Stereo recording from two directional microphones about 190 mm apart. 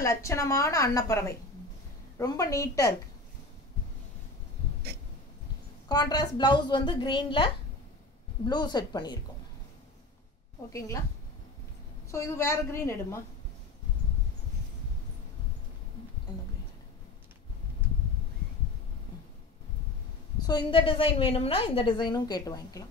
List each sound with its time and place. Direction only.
0.0 s a woman's voice: 15° left (ahead or behind)
5.9 s a woman's voice: 20° left (ahead or behind)
10.7 s a woman's voice: 15° left (ahead or behind)
12.1 s a woman's voice: 15° left (ahead or behind)
20.3 s a woman's voice: 20° left (ahead or behind)